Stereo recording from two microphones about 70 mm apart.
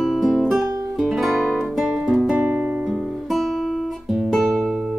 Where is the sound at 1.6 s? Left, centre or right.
Centre.